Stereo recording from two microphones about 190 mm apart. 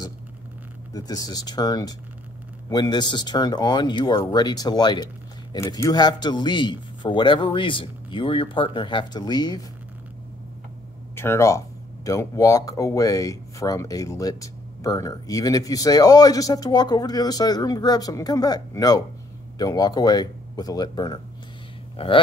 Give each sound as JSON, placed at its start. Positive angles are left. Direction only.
{"t": 0.9, "sound": "speech", "side_deg": 20}
{"t": 11.1, "sound": "speech", "side_deg": 15}